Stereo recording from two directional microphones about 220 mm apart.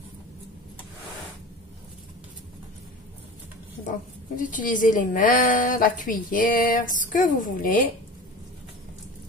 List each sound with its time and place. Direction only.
4.4 s a woman's voice: 35° left (ahead or behind)